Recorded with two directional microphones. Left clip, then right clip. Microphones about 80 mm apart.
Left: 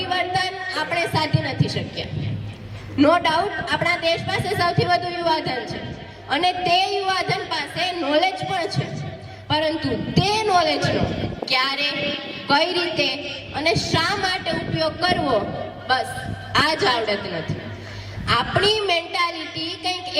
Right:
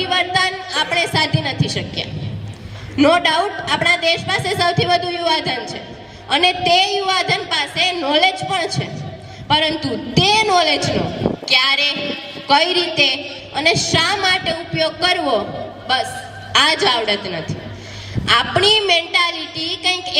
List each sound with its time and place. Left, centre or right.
0.0 s music: right
2.9 s a woman's voice: right
16.5 s a woman's voice: right